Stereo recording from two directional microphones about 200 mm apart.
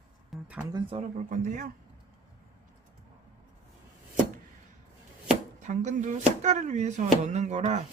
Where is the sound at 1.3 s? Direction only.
40° right (ahead or behind).